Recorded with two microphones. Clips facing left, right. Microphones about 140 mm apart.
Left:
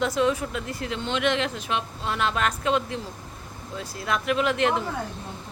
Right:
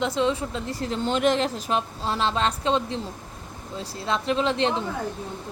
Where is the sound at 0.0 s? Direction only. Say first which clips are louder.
Even; 25° right (ahead or behind).